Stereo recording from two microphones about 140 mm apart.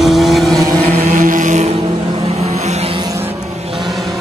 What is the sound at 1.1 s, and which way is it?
Chant, 70° right (ahead or behind).